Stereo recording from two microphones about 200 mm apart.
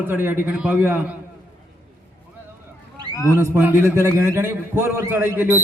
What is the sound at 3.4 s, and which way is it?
A man's voice, 10° right (ahead or behind).